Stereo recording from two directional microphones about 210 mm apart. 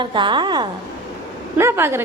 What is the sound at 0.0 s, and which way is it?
A woman's voice, 20° right (ahead or behind).